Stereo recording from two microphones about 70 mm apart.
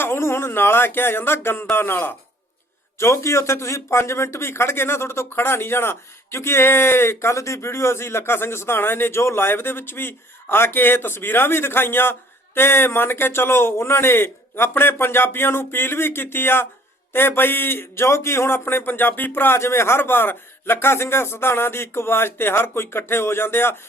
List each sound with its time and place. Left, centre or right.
0.0 s a man's voice: left
3.0 s speech: left